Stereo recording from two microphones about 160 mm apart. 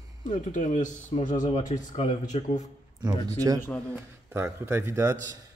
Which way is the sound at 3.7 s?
5° left (ahead or behind).